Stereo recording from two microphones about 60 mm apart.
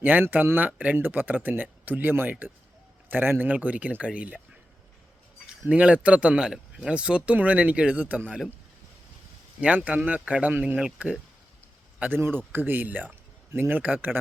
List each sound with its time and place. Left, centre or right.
0.0 s speech: right
5.5 s speech: right
9.6 s speech: right
11.9 s a man's voice: right